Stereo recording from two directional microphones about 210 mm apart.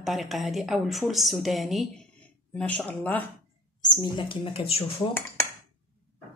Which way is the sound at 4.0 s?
25° left (ahead or behind).